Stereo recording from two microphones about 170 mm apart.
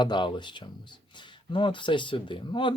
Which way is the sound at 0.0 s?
25° left (ahead or behind).